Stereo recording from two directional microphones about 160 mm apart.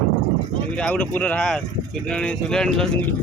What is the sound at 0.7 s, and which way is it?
Speech, 5° left (ahead or behind).